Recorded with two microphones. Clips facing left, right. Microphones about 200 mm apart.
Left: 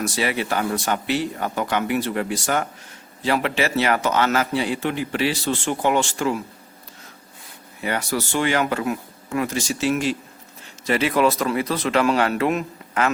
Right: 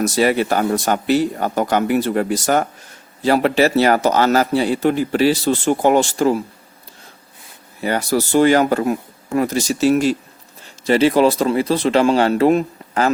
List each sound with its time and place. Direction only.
0.0 s a man's voice: 40° right (ahead or behind)
7.8 s a man's voice: 35° right (ahead or behind)